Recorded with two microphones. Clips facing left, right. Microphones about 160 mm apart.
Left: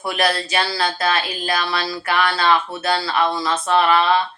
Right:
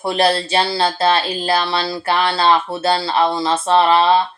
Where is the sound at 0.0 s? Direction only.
30° right (ahead or behind).